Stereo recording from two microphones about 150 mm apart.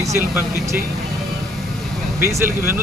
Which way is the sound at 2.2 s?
15° right (ahead or behind).